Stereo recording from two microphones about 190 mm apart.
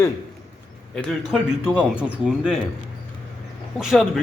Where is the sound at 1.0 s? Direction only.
5° right (ahead or behind).